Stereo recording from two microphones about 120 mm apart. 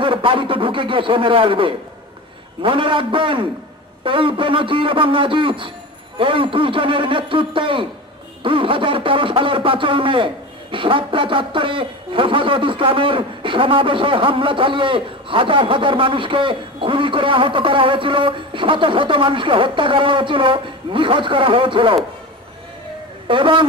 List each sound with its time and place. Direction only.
0.0 s speech: 45° right (ahead or behind)
23.2 s speech: 45° right (ahead or behind)